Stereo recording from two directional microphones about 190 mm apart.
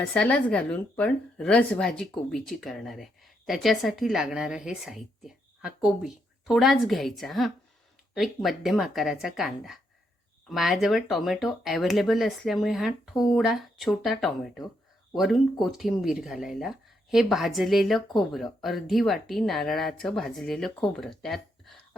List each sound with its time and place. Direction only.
0.0 s speech: 5° left (ahead or behind)